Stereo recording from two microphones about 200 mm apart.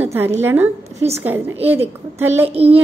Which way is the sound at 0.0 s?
10° right (ahead or behind).